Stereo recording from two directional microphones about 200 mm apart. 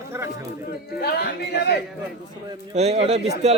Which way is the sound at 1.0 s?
50° left (ahead or behind).